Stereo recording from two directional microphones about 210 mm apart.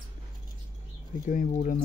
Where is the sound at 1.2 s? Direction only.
40° left (ahead or behind).